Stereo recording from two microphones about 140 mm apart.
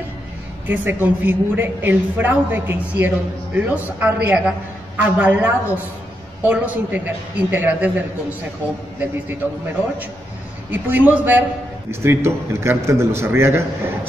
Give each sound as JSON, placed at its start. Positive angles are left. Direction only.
{"t": 0.7, "sound": "a woman's voice", "side_deg": -15}
{"t": 10.7, "sound": "a woman's voice", "side_deg": -10}